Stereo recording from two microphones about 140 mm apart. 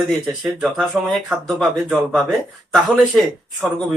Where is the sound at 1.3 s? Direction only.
Centre (ahead or behind).